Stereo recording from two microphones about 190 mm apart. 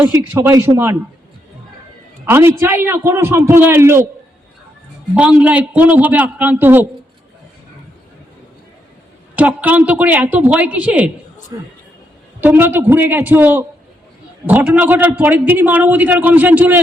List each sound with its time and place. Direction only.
0.0 s a man's voice: 10° right (ahead or behind)
2.3 s a man's voice: 10° right (ahead or behind)
5.1 s a man's voice: 5° right (ahead or behind)
9.3 s a man's voice: 5° right (ahead or behind)
11.5 s a man's voice: 20° right (ahead or behind)
12.4 s a man's voice: 10° right (ahead or behind)